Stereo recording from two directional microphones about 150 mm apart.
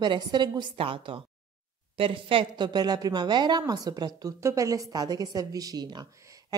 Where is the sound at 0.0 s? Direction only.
30° right (ahead or behind).